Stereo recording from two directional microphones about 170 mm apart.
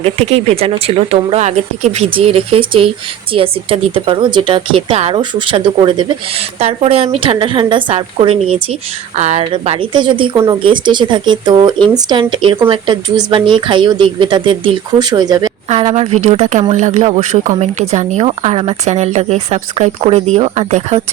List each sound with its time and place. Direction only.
0.0 s speech: 35° right (ahead or behind)
15.7 s speech: 40° right (ahead or behind)